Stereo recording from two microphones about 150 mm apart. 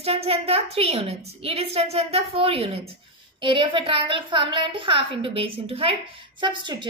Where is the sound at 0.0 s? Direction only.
40° right (ahead or behind).